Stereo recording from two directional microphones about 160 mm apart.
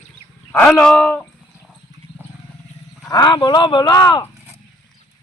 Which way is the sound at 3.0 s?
25° left (ahead or behind).